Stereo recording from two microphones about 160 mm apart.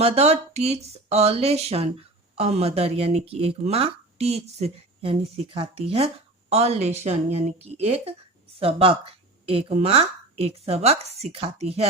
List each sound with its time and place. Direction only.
0.0 s speech: 40° right (ahead or behind)